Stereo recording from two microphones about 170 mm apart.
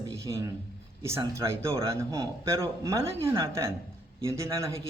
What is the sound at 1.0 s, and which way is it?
A man's voice, 15° right (ahead or behind).